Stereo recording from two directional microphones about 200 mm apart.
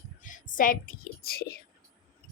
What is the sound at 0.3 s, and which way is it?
A child's voice, 40° left (ahead or behind).